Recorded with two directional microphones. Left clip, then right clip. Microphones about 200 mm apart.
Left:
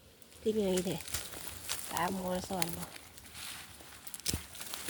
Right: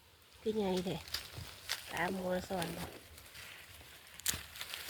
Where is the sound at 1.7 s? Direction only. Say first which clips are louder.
Even; 20° left (ahead or behind).